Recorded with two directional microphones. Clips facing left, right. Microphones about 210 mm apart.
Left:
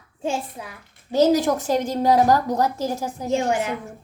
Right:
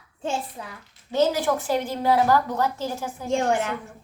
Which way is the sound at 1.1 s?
40° left (ahead or behind).